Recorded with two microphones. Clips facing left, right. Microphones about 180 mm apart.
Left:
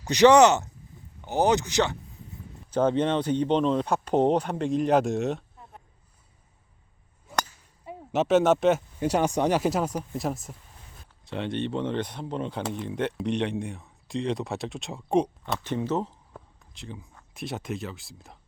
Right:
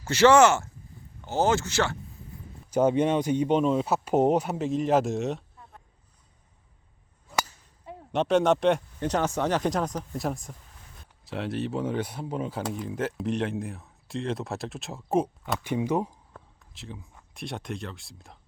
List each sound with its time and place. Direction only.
0.0 s speech: 15° left (ahead or behind)
2.6 s speech: 10° right (ahead or behind)
7.9 s speech: 5° left (ahead or behind); by 16.1 s 15° right (ahead or behind)
16.7 s speech: centre (ahead or behind)